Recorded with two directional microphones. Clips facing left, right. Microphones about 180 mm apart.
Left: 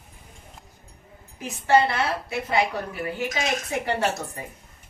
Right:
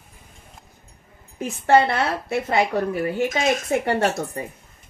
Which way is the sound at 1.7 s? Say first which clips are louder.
Right 3 dB; 55° right (ahead or behind).